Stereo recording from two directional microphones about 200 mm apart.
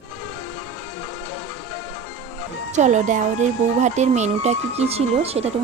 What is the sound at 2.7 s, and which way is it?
Speech, 35° right (ahead or behind).